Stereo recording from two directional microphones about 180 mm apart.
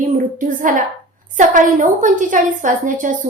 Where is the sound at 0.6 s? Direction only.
45° right (ahead or behind).